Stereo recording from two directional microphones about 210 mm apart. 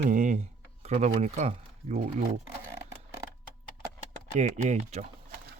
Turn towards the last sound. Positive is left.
turn(degrees=-30)  # may be behind; listen again after turning